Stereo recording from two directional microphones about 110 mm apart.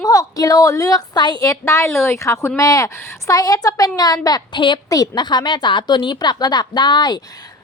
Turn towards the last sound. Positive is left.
turn(degrees=40)  # may be behind; listen again after turning